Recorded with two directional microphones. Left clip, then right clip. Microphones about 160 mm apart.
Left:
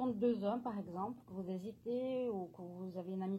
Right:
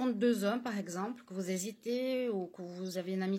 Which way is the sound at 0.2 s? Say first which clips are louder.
Right 5 dB; 50° right (ahead or behind).